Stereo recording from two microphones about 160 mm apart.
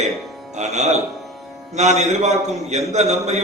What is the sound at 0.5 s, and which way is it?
A man's voice, 45° right (ahead or behind).